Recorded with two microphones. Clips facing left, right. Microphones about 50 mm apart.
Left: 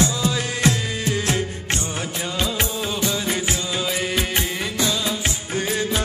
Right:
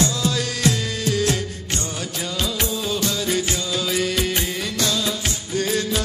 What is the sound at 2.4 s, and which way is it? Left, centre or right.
Music, left.